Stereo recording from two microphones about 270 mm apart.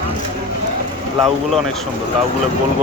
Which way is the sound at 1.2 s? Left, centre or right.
Centre.